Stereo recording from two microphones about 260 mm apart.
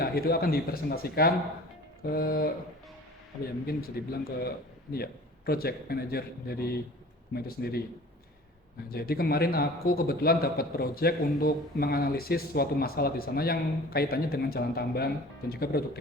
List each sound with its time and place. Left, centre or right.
0.0 s a man's voice: left
3.7 s a man's voice: left
8.9 s a man's voice: left